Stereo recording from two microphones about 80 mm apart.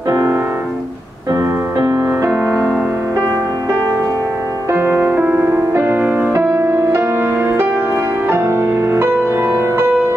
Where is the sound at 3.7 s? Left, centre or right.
Right.